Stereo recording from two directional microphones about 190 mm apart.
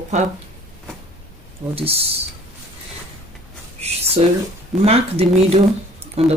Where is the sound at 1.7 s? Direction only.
30° right (ahead or behind).